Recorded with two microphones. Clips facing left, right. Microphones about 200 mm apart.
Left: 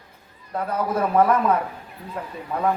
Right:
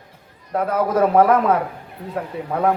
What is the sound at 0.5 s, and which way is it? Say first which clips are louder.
Speech: right 6 dB; 90° right.